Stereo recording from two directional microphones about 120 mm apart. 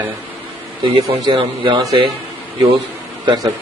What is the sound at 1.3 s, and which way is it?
Speech, 45° right (ahead or behind).